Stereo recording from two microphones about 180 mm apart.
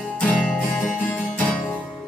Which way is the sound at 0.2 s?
5° left (ahead or behind).